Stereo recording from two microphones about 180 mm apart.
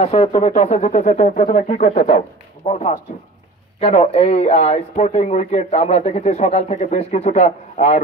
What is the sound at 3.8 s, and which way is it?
Speech, 35° left (ahead or behind).